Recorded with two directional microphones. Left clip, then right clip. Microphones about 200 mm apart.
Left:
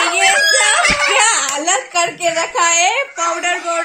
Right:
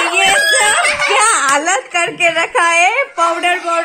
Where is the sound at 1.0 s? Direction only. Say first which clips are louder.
Right 1 dB; 5° right (ahead or behind).